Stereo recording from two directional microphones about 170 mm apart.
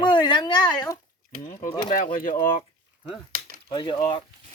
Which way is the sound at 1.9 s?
55° left (ahead or behind).